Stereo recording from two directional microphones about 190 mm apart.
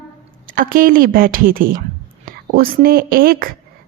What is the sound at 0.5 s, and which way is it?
A woman's voice, 45° right (ahead or behind).